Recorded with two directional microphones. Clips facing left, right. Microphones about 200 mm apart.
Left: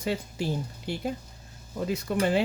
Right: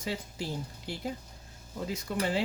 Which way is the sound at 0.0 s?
60° left (ahead or behind).